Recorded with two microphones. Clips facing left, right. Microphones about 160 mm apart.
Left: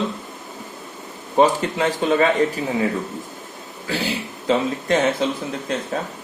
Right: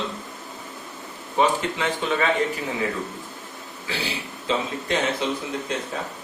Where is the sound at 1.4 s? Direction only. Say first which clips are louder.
Left 5 dB; 45° left (ahead or behind).